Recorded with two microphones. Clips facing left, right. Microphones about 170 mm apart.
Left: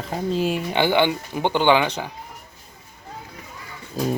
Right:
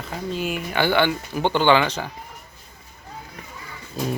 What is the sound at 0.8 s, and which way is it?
Speech, 15° left (ahead or behind).